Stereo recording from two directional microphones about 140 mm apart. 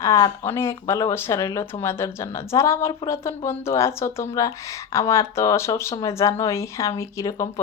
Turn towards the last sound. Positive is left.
turn(degrees=25)  # may be behind; listen again after turning